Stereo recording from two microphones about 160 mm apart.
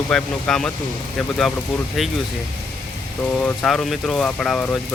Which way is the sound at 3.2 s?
10° left (ahead or behind).